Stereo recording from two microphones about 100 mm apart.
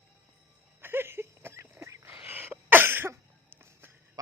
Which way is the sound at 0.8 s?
25° right (ahead or behind).